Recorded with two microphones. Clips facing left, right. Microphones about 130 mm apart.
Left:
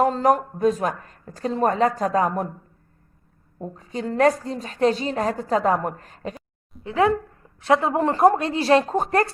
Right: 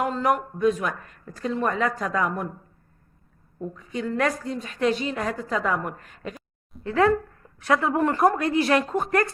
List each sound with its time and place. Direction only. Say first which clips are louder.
0.0 s a woman's voice: left 5 dB; 35° left (ahead or behind)
3.6 s a woman's voice: even; 35° left (ahead or behind)
6.8 s a woman's voice: even; 20° left (ahead or behind)